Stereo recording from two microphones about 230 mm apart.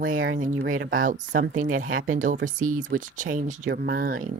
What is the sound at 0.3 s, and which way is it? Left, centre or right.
Speech, right.